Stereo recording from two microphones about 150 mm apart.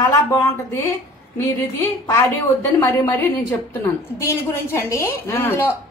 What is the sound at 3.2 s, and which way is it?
A woman's voice, 15° left (ahead or behind).